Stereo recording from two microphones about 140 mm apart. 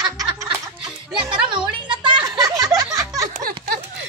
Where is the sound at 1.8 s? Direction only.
35° right (ahead or behind).